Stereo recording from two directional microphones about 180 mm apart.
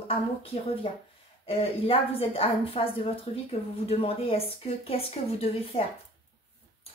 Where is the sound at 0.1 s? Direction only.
30° left (ahead or behind).